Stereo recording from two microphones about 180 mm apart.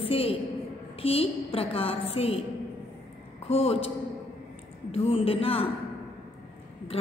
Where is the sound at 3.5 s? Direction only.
35° left (ahead or behind).